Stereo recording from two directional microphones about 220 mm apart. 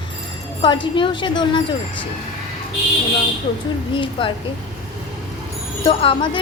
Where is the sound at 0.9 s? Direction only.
20° left (ahead or behind).